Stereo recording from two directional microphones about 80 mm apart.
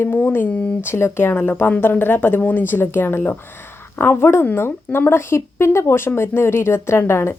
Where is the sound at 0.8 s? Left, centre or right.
Left.